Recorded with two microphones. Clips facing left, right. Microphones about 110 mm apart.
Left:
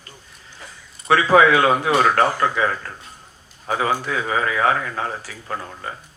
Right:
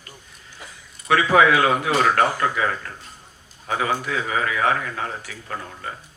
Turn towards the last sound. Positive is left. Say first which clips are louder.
# left 3 dB
turn(degrees=35)  # may be behind; listen again after turning